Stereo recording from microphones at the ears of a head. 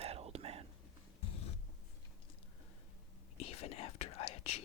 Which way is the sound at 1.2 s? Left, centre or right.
Left.